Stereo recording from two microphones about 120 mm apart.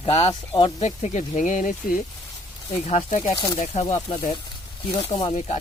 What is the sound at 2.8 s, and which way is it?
Speech, 65° left (ahead or behind).